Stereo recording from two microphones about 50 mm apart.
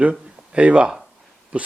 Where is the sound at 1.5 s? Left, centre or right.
Right.